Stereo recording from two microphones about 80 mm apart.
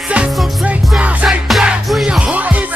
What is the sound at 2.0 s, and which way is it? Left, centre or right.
Music, centre.